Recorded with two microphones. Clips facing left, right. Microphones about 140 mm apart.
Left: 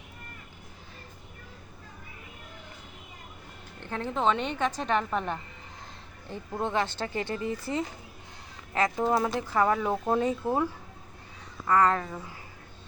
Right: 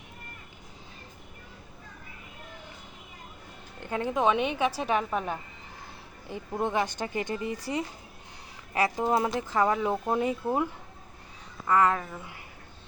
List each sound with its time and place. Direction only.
3.8 s a woman's voice: 15° right (ahead or behind)
11.7 s a woman's voice: 15° right (ahead or behind)